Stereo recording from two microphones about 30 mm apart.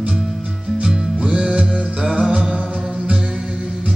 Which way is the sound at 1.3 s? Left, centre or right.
Right.